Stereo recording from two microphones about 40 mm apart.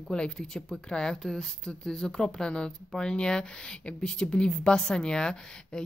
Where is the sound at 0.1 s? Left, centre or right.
Left.